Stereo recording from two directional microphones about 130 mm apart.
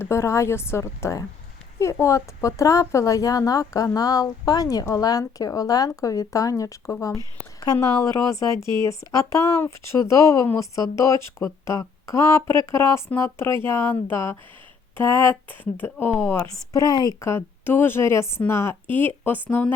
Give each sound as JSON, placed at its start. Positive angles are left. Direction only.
{"t": 0.0, "sound": "a woman's voice", "side_deg": 20}
{"t": 8.5, "sound": "speech", "side_deg": -35}
{"t": 8.9, "sound": "a woman's voice", "side_deg": 20}